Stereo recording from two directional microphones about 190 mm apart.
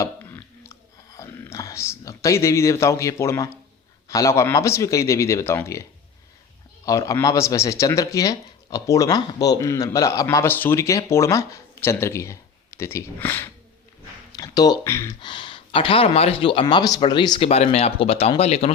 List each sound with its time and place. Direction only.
0.0 s a sound: 10° left (ahead or behind)
0.7 s whispering: 15° left (ahead or behind)
4.1 s speech: 15° left (ahead or behind)
6.8 s speech: 15° left (ahead or behind); by 18.7 s 35° left (ahead or behind)